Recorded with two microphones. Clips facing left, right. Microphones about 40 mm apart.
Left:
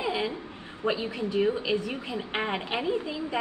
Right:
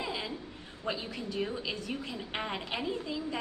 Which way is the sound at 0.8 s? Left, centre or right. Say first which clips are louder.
Left 7 dB; left.